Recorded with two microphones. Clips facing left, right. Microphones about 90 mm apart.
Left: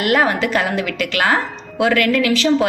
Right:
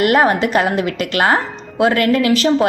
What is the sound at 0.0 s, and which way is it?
A woman's voice, 35° right (ahead or behind).